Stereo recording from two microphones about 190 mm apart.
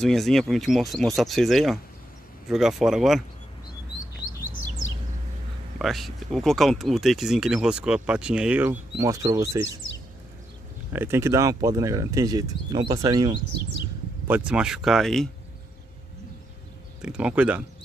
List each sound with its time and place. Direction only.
0.0 s speech: centre (ahead or behind)
5.8 s speech: centre (ahead or behind); by 9.6 s 15° right (ahead or behind)
10.9 s speech: 10° right (ahead or behind)
14.2 s speech: 5° right (ahead or behind)
17.0 s speech: 5° right (ahead or behind)